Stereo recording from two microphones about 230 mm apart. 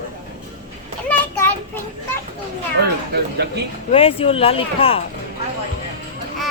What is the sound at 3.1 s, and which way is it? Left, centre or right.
Speech, right.